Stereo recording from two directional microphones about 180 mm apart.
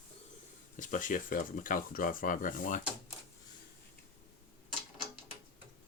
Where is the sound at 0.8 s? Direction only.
45° left (ahead or behind).